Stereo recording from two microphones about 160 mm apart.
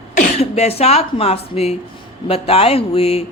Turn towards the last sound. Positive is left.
turn(degrees=40)  # may be behind; listen again after turning